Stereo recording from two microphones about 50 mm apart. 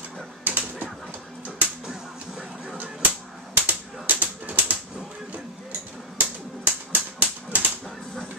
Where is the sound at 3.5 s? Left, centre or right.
Right.